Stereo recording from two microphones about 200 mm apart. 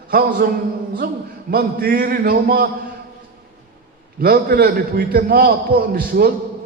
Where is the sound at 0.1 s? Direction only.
50° right (ahead or behind).